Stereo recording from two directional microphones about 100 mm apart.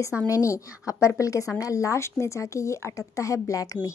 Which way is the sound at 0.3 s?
30° left (ahead or behind).